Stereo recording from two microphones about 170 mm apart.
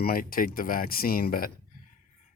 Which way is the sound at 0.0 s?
60° left (ahead or behind).